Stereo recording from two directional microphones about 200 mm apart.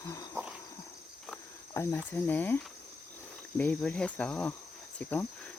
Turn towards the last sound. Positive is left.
turn(degrees=10)  # may be behind; listen again after turning